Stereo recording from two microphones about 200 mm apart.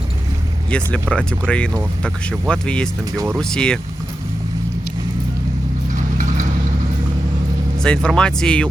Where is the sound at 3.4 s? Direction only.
5° left (ahead or behind).